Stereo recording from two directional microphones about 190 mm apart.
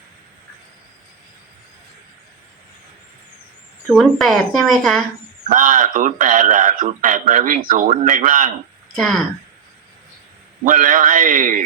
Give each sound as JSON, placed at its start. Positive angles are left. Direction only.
{"t": 3.8, "sound": "speech", "side_deg": 0}
{"t": 5.5, "sound": "a man's voice", "side_deg": -45}
{"t": 9.0, "sound": "speech", "side_deg": 0}
{"t": 10.7, "sound": "a man's voice", "side_deg": -45}